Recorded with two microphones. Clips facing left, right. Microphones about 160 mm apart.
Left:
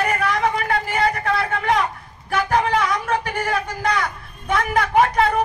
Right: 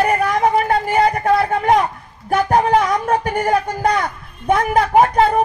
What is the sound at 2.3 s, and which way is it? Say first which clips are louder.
Speech: right 5 dB; 40° right (ahead or behind).